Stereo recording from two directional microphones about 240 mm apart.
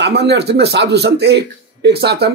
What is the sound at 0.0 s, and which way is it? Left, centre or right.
Speech, right.